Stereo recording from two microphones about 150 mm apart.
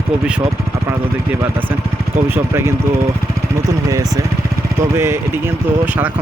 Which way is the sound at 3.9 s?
20° right (ahead or behind).